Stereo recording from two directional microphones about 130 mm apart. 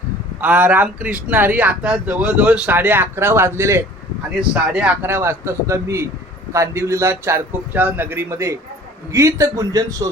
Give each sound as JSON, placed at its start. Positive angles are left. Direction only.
{"t": 0.4, "sound": "a man's voice", "side_deg": -10}